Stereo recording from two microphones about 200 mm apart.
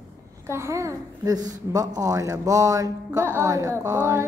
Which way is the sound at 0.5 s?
15° right (ahead or behind).